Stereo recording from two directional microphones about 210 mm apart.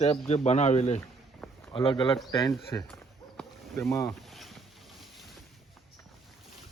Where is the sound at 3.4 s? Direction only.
Centre (ahead or behind).